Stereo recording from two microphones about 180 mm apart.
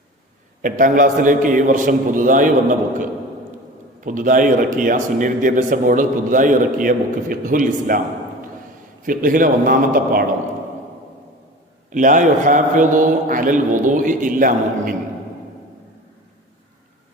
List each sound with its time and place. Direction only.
0.6 s a man's voice: 45° right (ahead or behind)
4.0 s a man's voice: 45° right (ahead or behind)
9.0 s a man's voice: 50° right (ahead or behind)
11.9 s a man's voice: 45° right (ahead or behind)